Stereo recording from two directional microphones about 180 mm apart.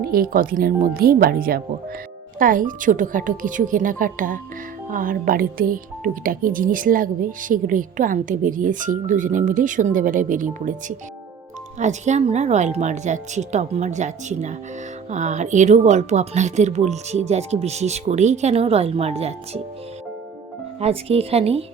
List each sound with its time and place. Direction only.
0.0 s speech: 55° right (ahead or behind); by 19.6 s 35° right (ahead or behind)
20.8 s speech: 35° right (ahead or behind)